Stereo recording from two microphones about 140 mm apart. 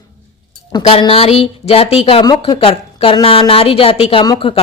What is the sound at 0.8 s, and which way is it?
Speech, 45° left (ahead or behind).